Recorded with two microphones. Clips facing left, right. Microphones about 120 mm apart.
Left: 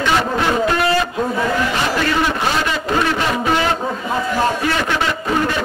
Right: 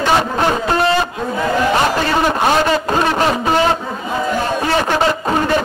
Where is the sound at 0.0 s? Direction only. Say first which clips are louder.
Right 2 dB; 40° right (ahead or behind).